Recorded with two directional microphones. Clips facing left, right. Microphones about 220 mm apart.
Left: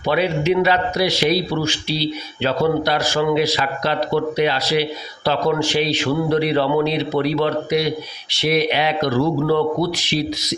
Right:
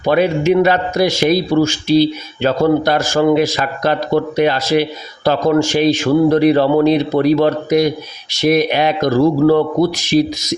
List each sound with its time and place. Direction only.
0.0 s a man's voice: 50° right (ahead or behind)